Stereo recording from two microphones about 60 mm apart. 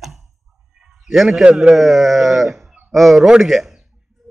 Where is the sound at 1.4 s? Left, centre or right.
Centre.